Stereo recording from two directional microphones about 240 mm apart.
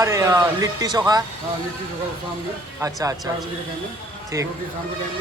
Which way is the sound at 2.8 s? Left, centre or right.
Centre.